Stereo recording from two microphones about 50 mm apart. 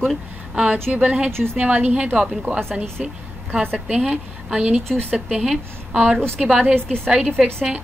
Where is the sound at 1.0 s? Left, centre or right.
Centre.